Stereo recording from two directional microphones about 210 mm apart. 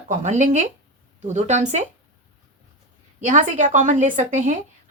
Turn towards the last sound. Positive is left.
turn(degrees=-35)  # may be behind; listen again after turning